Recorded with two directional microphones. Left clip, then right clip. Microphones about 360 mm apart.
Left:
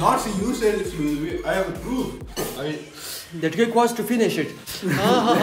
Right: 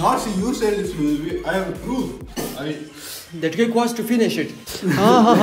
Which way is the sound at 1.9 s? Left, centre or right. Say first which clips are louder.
Right 2 dB; centre.